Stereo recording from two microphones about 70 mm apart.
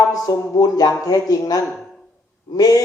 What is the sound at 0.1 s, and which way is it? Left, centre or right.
Speech, left.